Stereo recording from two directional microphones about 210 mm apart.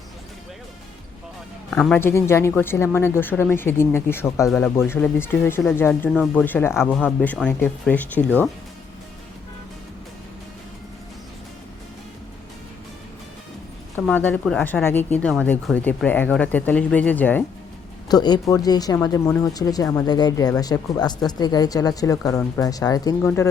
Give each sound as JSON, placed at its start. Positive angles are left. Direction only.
{"t": 1.7, "sound": "speech", "side_deg": 5}
{"t": 4.4, "sound": "speech", "side_deg": 0}
{"t": 13.9, "sound": "speech", "side_deg": 10}
{"t": 18.1, "sound": "speech", "side_deg": 20}